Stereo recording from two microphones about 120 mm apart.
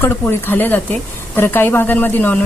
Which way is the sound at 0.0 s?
20° left (ahead or behind).